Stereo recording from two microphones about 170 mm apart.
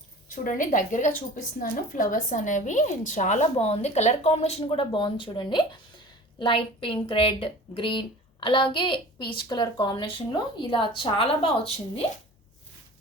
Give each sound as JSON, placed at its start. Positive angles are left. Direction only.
{"t": 0.3, "sound": "a woman's voice", "side_deg": 50}